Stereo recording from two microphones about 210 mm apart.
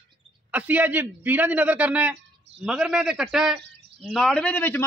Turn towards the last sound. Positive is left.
turn(degrees=10)  # may be behind; listen again after turning